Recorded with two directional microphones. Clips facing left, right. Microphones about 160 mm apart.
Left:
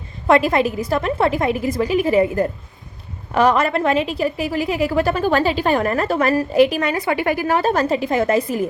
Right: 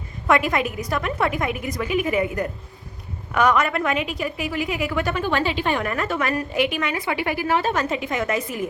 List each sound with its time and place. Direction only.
0.3 s a woman's voice: 30° left (ahead or behind)